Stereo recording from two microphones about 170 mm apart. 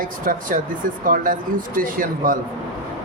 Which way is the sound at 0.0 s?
55° right (ahead or behind).